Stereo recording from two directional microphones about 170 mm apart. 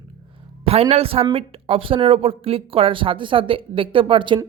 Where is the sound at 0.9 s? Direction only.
35° right (ahead or behind).